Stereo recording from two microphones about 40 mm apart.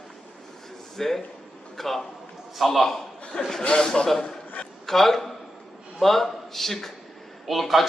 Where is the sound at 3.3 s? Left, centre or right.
Left.